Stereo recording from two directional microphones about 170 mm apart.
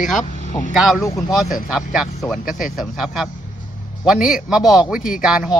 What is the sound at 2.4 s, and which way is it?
Speech, 55° left (ahead or behind).